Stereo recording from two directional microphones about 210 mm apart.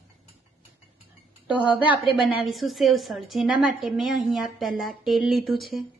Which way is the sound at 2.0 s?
25° left (ahead or behind).